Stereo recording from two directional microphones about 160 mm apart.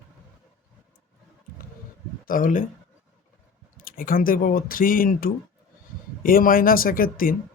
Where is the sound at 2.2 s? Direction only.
60° left (ahead or behind).